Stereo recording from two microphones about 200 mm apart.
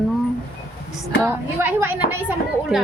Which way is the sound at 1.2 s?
10° right (ahead or behind).